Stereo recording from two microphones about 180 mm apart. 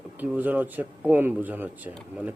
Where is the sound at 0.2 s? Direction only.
10° right (ahead or behind).